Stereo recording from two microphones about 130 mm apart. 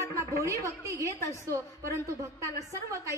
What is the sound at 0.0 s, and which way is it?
A woman's voice, 25° right (ahead or behind).